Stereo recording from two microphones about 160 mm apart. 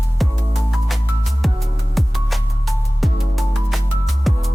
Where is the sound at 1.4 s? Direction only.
Centre (ahead or behind).